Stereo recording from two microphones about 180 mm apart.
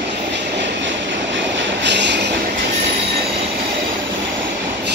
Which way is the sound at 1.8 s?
75° right (ahead or behind).